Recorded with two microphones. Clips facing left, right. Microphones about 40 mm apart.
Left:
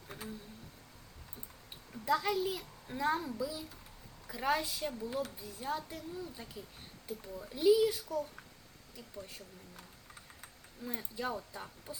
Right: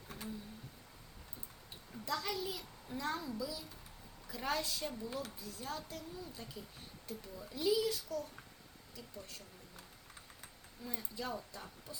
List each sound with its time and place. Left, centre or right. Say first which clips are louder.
0.1 s a sound: left 2 dB; centre
1.9 s a child's voice: left 7 dB; left
4.3 s a woman's voice: left 5 dB; centre
5.4 s speech: left 5 dB; left
10.8 s speech: left 4 dB; left